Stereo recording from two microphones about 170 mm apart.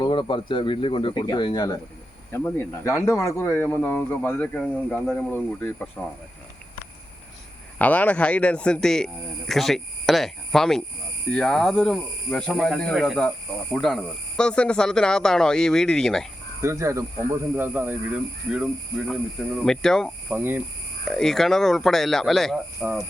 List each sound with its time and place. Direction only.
0.0 s speech: 30° left (ahead or behind)
2.3 s speech: 10° left (ahead or behind)
7.8 s speech: 10° left (ahead or behind)
16.6 s speech: 15° right (ahead or behind); by 20.1 s 5° left (ahead or behind)
20.3 s speech: 10° right (ahead or behind)
21.0 s speech: 5° left (ahead or behind)